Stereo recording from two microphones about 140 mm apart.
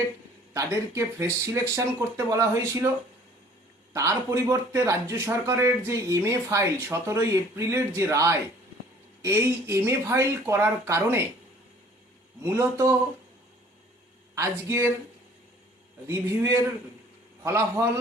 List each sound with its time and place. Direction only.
0.5 s speech: 20° right (ahead or behind)
3.9 s speech: 20° right (ahead or behind)
12.4 s speech: 20° right (ahead or behind)
14.3 s speech: 20° right (ahead or behind)
16.0 s speech: 20° right (ahead or behind)